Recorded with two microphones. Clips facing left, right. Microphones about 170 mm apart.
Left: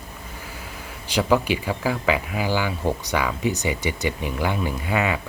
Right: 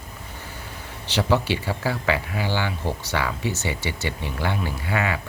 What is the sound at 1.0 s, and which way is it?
Speech, 15° left (ahead or behind).